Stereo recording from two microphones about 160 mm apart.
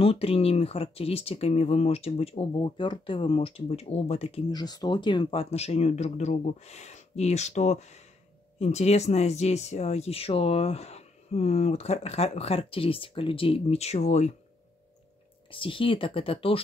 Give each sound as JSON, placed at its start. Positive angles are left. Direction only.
{"t": 0.0, "sound": "speech", "side_deg": 35}
{"t": 4.5, "sound": "speech", "side_deg": 25}
{"t": 15.5, "sound": "speech", "side_deg": 35}